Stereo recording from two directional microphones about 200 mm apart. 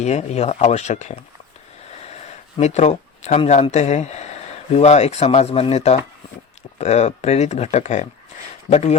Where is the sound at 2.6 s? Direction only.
35° left (ahead or behind).